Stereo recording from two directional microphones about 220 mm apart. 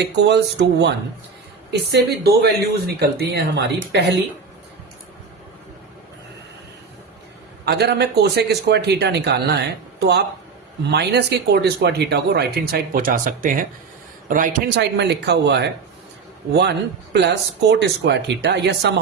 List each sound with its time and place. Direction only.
0.0 s speech: 50° right (ahead or behind)
7.6 s a man's voice: 45° right (ahead or behind)
14.8 s speech: 50° right (ahead or behind)